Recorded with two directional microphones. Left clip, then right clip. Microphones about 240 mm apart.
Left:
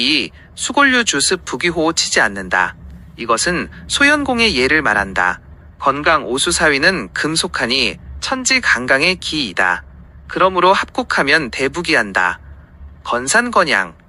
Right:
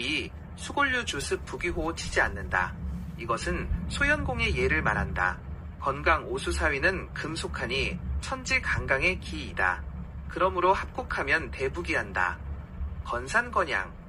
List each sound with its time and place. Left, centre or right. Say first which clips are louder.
0.0 s speech: left 15 dB; left